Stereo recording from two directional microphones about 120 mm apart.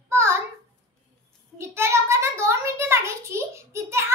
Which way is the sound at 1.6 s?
20° right (ahead or behind).